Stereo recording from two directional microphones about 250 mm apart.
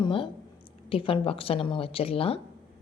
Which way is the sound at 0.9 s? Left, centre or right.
Left.